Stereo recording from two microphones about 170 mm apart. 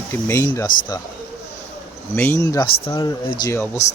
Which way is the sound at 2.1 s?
15° left (ahead or behind).